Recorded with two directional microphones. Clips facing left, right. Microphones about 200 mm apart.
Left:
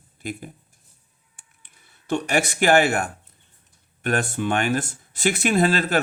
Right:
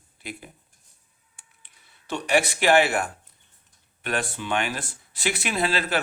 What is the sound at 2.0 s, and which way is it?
Speech, 45° left (ahead or behind).